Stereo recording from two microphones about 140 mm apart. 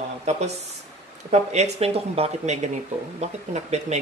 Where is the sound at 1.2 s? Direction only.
50° right (ahead or behind).